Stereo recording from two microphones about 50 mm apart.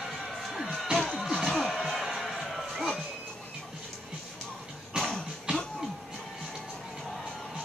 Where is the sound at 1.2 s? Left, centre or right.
Centre.